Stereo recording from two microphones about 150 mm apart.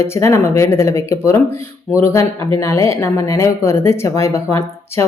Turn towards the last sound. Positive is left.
turn(degrees=20)  # may be behind; listen again after turning